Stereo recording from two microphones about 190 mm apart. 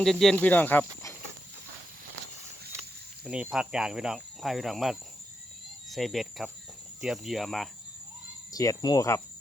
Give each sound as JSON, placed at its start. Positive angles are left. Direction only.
{"t": 0.0, "sound": "speech", "side_deg": 0}
{"t": 3.2, "sound": "speech", "side_deg": -5}
{"t": 8.5, "sound": "speech", "side_deg": 20}